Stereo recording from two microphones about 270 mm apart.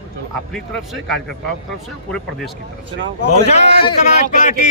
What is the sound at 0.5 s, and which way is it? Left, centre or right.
Speech, centre.